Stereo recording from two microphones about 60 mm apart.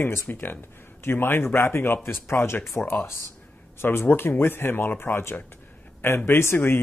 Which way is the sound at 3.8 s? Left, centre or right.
Left.